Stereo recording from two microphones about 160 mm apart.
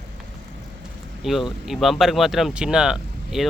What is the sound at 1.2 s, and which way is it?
Speech, centre (ahead or behind).